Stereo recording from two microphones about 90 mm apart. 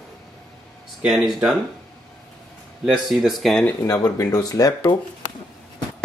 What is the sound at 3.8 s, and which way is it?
Speech, 40° left (ahead or behind).